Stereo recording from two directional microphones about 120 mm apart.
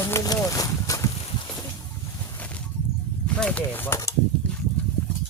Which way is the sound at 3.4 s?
10° left (ahead or behind).